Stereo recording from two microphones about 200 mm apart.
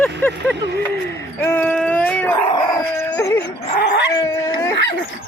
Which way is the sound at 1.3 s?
10° left (ahead or behind).